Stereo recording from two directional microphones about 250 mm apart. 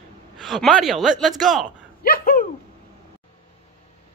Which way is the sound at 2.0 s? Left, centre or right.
Left.